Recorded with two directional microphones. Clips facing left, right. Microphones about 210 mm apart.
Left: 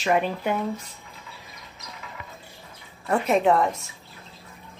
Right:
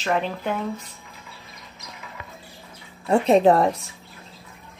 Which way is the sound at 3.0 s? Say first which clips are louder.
Right 4 dB; 30° right (ahead or behind).